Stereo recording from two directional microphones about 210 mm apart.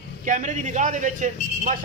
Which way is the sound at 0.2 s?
35° right (ahead or behind).